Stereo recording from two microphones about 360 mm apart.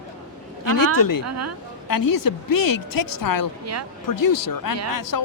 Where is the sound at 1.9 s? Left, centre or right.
Left.